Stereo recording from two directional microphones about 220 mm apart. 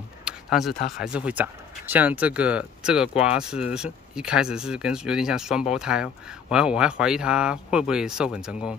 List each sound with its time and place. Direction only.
0.2 s tick-tock: 5° right (ahead or behind)
0.7 s speech: 40° left (ahead or behind)
1.0 s speech: 5° right (ahead or behind)